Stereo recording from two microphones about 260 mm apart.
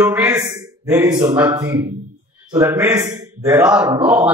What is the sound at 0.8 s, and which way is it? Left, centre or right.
A man's voice, centre.